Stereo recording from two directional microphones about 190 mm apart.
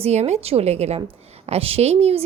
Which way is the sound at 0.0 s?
35° right (ahead or behind).